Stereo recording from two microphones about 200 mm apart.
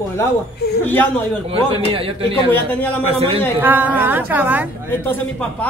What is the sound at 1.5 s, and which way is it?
A man's voice, 25° right (ahead or behind).